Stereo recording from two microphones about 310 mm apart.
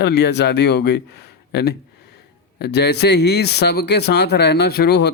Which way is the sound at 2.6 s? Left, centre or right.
Left.